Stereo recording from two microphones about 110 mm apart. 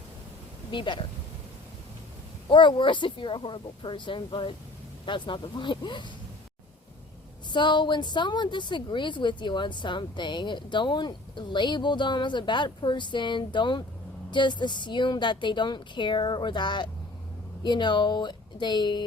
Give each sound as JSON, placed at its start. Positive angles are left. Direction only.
{"t": 0.7, "sound": "a woman's voice", "side_deg": 45}
{"t": 2.5, "sound": "a woman's voice", "side_deg": 45}
{"t": 7.5, "sound": "a woman's voice", "side_deg": 45}